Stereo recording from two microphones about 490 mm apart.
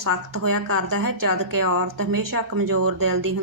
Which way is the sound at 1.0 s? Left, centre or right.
Right.